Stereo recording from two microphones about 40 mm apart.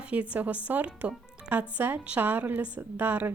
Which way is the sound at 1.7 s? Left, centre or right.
Right.